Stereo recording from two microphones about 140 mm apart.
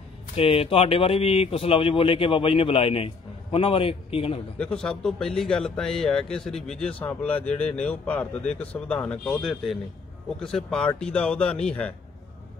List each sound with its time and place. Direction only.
0.4 s speech: 40° left (ahead or behind)
4.6 s a man's voice: 5° left (ahead or behind)